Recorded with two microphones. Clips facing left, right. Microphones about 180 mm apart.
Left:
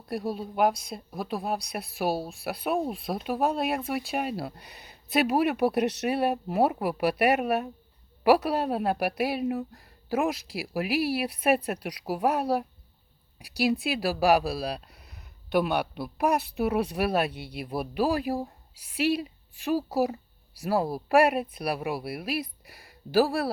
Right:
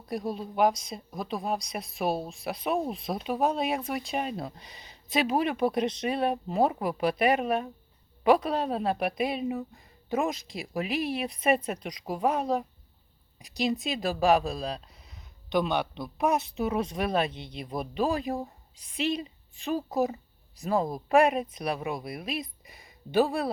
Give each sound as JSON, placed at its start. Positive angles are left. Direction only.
{"t": 0.0, "sound": "a woman's voice", "side_deg": 5}
{"t": 14.8, "sound": "a sound", "side_deg": 65}
{"t": 15.5, "sound": "a woman's voice", "side_deg": 5}